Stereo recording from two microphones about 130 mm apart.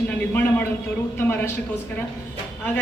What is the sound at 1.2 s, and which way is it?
Speech, 15° left (ahead or behind).